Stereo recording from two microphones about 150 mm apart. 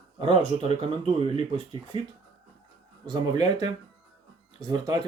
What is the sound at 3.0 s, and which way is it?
Speech, 25° right (ahead or behind).